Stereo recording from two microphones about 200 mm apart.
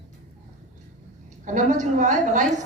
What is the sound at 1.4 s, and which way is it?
A woman's voice, 40° right (ahead or behind).